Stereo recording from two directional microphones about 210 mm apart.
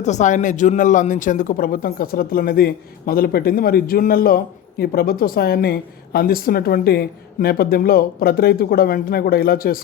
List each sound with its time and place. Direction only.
0.0 s speech: 35° left (ahead or behind)